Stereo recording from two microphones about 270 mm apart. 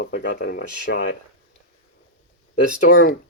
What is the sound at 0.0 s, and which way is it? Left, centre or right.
Speech, left.